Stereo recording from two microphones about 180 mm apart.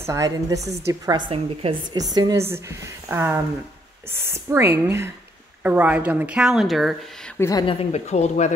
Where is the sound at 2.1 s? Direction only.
20° right (ahead or behind); by 7.0 s centre (ahead or behind).